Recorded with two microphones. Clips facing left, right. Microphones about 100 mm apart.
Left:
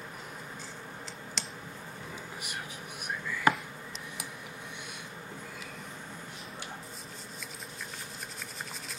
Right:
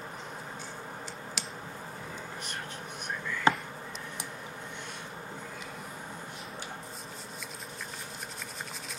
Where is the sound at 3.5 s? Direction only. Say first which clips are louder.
Right 1 dB; 25° right (ahead or behind).